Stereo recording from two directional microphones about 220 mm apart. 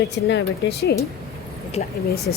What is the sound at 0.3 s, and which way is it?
Speech, 50° left (ahead or behind).